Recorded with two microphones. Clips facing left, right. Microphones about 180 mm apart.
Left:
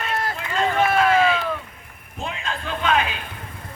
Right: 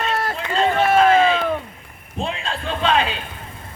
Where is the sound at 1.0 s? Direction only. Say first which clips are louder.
Right 3 dB; 30° right (ahead or behind).